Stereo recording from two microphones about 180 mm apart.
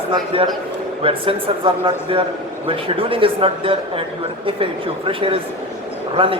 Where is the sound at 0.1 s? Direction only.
25° right (ahead or behind).